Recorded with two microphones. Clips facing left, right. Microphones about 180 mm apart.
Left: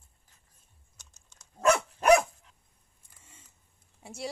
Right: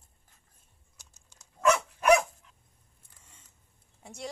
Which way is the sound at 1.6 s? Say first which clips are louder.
Left 1 dB; 30° left (ahead or behind).